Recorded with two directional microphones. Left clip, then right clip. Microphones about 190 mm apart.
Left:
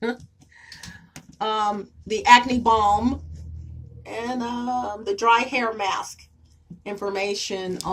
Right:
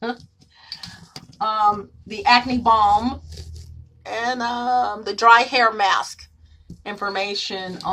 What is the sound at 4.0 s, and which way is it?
Speech, 35° right (ahead or behind).